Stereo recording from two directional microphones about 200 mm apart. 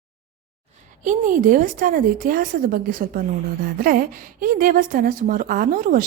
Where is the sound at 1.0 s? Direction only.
40° right (ahead or behind).